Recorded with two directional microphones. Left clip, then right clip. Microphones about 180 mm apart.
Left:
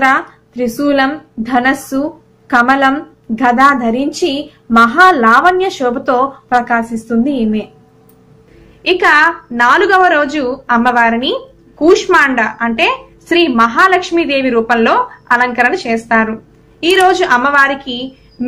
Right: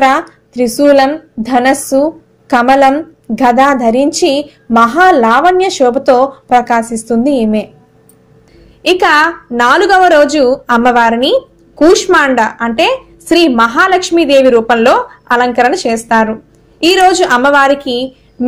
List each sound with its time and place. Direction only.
0.0 s a woman's voice: 35° right (ahead or behind)
8.8 s a woman's voice: 40° right (ahead or behind)